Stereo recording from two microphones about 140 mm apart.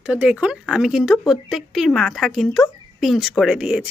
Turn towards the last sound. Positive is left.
turn(degrees=-5)  # may be behind; listen again after turning